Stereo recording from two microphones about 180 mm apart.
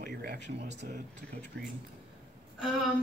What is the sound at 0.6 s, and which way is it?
Speech, 40° right (ahead or behind).